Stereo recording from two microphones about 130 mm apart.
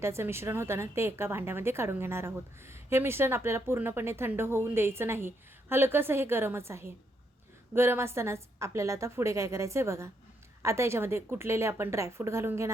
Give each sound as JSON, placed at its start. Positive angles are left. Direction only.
{"t": 0.0, "sound": "a woman's voice", "side_deg": -20}